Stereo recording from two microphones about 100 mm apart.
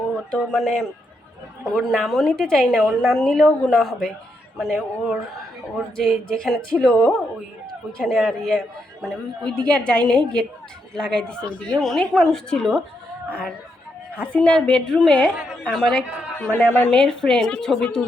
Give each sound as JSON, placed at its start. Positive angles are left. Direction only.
{"t": 0.3, "sound": "a woman's voice", "side_deg": 5}
{"t": 14.2, "sound": "a woman's voice", "side_deg": 10}